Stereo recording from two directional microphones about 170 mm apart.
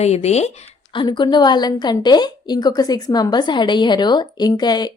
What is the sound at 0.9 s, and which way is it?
A woman's voice, 25° left (ahead or behind).